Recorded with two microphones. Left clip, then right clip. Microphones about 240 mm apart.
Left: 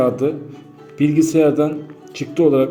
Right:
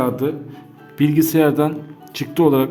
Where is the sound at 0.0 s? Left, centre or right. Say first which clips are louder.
Left 3 dB; centre.